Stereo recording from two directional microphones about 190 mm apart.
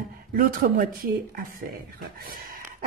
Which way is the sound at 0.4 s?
45° right (ahead or behind).